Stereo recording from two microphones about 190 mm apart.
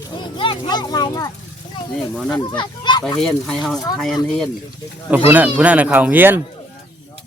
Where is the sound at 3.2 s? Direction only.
Centre (ahead or behind).